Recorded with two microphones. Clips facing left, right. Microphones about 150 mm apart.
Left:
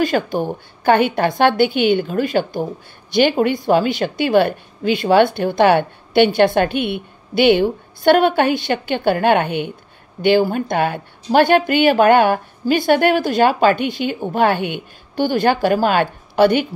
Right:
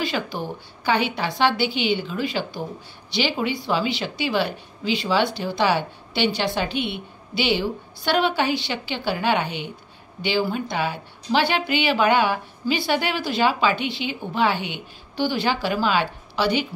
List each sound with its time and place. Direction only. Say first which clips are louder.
0.0 s a woman's voice: left 8 dB; 50° left (ahead or behind)